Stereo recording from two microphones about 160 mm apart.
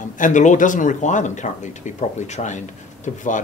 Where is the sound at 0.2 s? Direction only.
50° left (ahead or behind).